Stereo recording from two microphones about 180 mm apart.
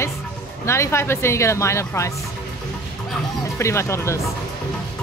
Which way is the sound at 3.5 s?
15° left (ahead or behind).